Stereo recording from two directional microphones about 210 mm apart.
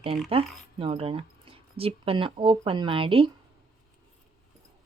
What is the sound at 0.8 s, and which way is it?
Speech, 25° right (ahead or behind).